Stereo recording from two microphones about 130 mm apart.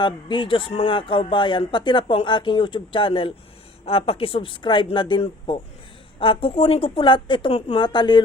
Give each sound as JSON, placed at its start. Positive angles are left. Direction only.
{"t": 0.0, "sound": "a woman's voice", "side_deg": 40}